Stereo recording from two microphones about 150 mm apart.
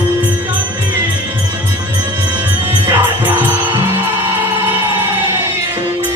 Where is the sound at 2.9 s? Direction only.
15° right (ahead or behind).